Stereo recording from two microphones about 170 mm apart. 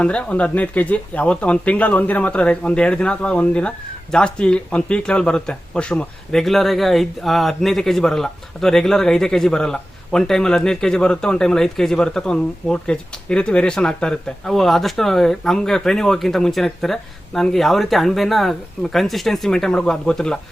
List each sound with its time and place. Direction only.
0.0 s speech: 5° left (ahead or behind)